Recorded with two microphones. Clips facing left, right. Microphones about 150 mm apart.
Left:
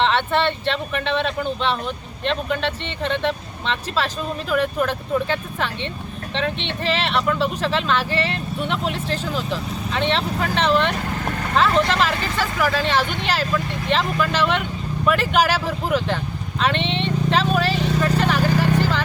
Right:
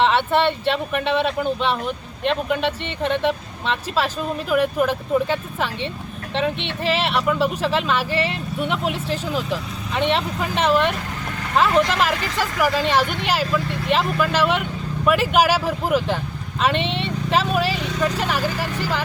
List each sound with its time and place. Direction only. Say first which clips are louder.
0.0 s speech: right 2 dB; 10° right (ahead or behind)
16.6 s vehicle: right 1 dB; 5° right (ahead or behind)
18.2 s speech: left 3 dB; 10° right (ahead or behind)
18.5 s a sound: left 7 dB; 45° left (ahead or behind)